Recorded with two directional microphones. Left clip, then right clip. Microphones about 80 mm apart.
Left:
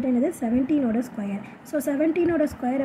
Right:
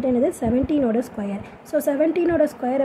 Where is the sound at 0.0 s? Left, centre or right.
Right.